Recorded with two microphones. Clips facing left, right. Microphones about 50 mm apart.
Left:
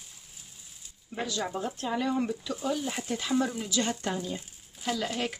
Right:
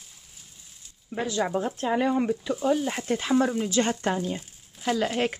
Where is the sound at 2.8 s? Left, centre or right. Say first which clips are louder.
Right 5 dB; right.